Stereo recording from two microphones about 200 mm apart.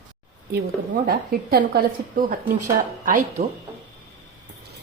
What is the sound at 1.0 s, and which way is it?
A woman's voice, 50° right (ahead or behind).